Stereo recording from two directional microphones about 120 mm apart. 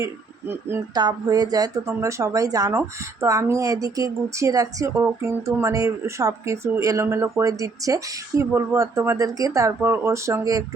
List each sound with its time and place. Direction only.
0.0 s speech: 20° right (ahead or behind)
0.9 s speech: 35° right (ahead or behind)